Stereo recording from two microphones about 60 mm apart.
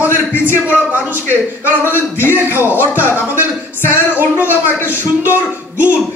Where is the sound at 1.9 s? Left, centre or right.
Left.